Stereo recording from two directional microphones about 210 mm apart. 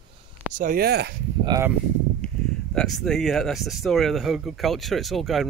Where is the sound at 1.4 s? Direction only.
15° right (ahead or behind).